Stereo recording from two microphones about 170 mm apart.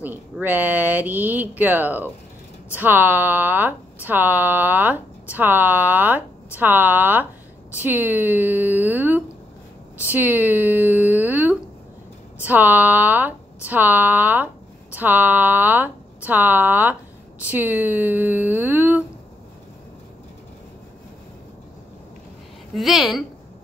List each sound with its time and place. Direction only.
0.0 s speech: 10° right (ahead or behind)
9.9 s a sound: 10° right (ahead or behind)
12.4 s speech: 10° right (ahead or behind)
22.8 s a woman's voice: centre (ahead or behind)